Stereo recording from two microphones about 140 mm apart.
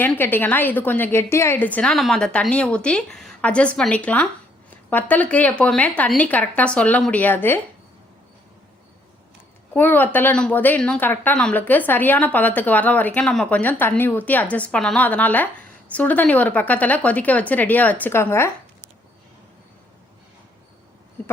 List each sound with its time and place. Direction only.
0.0 s a woman's voice: 15° left (ahead or behind)
9.7 s a woman's voice: 15° left (ahead or behind)